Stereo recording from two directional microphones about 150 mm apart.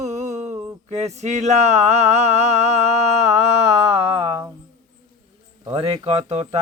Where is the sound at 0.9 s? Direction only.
50° right (ahead or behind).